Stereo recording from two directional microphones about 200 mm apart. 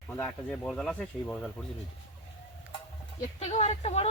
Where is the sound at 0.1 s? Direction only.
5° left (ahead or behind).